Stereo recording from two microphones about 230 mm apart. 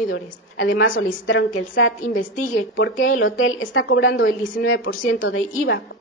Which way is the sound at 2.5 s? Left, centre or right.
Left.